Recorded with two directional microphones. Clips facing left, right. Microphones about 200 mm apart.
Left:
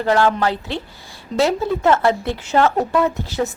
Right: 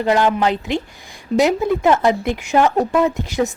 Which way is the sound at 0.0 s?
15° right (ahead or behind).